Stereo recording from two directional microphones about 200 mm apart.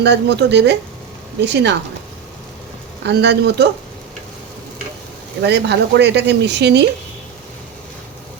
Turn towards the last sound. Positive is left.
turn(degrees=-60)  # may be behind; listen again after turning